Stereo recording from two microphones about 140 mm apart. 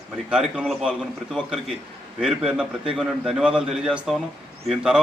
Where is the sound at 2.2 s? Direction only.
5° right (ahead or behind).